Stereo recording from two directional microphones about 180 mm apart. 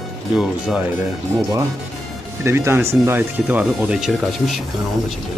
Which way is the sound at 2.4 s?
15° right (ahead or behind).